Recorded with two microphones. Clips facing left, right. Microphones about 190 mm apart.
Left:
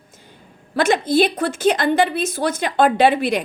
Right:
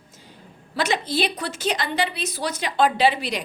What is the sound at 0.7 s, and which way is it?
A woman's voice, 50° left (ahead or behind).